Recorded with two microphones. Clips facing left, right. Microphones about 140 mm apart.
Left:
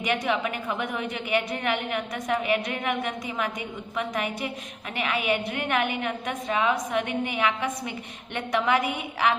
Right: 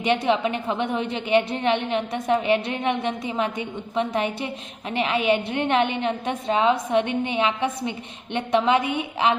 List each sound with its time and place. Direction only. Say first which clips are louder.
0.0 s a woman's voice: right 5 dB; 30° right (ahead or behind)